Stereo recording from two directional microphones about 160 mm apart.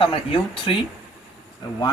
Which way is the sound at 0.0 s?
35° left (ahead or behind).